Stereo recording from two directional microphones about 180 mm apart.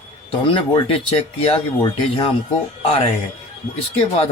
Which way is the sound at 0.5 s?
30° left (ahead or behind).